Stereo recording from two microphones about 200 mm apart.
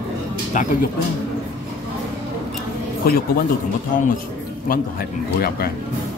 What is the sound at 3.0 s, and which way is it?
Speech, 50° left (ahead or behind).